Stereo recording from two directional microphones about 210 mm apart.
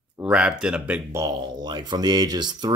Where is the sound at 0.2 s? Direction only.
5° right (ahead or behind).